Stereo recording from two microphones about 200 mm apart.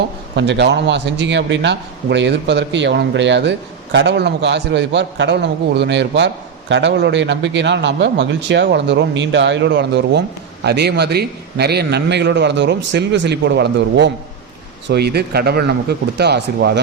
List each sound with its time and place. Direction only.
0.3 s a man's voice: 60° right (ahead or behind)